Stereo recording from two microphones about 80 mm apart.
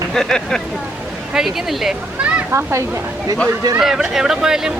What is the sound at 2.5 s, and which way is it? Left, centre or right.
Speech, right.